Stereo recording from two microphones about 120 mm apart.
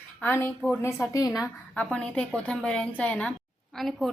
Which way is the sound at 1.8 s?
10° left (ahead or behind).